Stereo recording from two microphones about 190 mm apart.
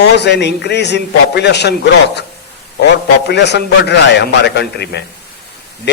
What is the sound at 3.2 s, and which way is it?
A man's voice, 65° left (ahead or behind).